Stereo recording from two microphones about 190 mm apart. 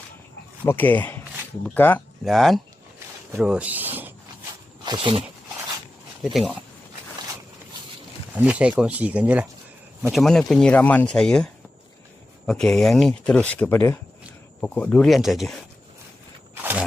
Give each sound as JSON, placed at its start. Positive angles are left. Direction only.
{"t": 0.6, "sound": "speech", "side_deg": 10}
{"t": 4.9, "sound": "speech", "side_deg": -25}
{"t": 6.3, "sound": "speech", "side_deg": 0}
{"t": 8.4, "sound": "speech", "side_deg": -5}
{"t": 12.5, "sound": "speech", "side_deg": 5}